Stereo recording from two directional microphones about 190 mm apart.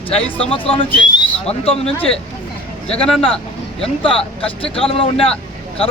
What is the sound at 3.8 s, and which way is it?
Speech, 30° left (ahead or behind).